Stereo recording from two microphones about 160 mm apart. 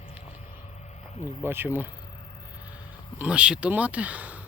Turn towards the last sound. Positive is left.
turn(degrees=-10)  # may be behind; listen again after turning